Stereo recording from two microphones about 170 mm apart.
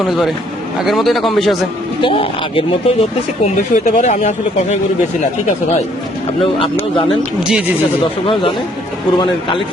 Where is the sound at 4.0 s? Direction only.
40° left (ahead or behind).